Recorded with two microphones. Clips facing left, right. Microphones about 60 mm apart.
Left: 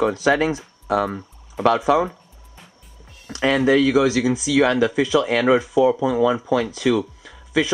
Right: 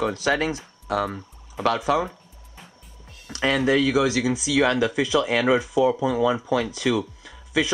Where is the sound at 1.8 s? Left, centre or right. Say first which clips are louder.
Left 5 dB; centre.